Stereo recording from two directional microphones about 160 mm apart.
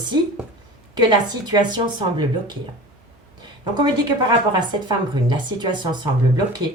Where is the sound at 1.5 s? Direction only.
30° right (ahead or behind).